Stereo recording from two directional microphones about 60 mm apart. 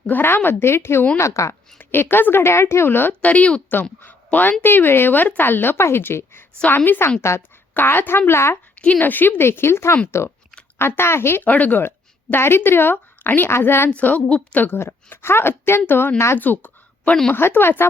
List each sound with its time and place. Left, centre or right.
0.1 s speech: left
1.2 s a woman's voice: left
1.8 s speech: left
3.1 s speech: left
7.2 s speech: left
7.7 s speech: left
9.0 s speech: left
11.4 s speech: left
11.8 s a woman's voice: left
13.9 s speech: left
16.1 s speech: left
16.4 s a sound: left
17.3 s speech: left